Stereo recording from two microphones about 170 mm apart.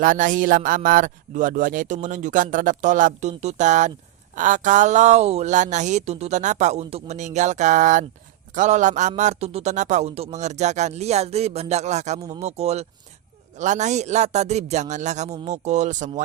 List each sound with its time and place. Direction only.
0.0 s a man's voice: 50° right (ahead or behind)